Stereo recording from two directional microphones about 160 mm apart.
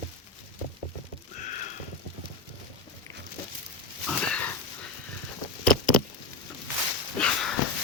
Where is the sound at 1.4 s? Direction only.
50° left (ahead or behind).